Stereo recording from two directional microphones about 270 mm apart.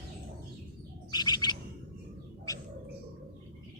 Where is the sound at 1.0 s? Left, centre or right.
Centre.